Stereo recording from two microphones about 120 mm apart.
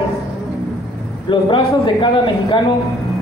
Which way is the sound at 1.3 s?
40° left (ahead or behind).